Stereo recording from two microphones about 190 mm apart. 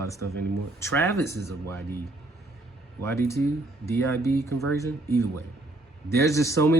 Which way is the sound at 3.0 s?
15° left (ahead or behind).